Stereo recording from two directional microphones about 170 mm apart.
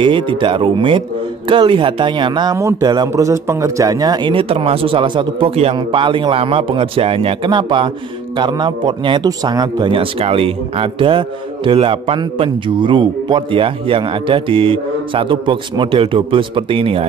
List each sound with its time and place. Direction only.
0.0 s a man's voice: 30° right (ahead or behind)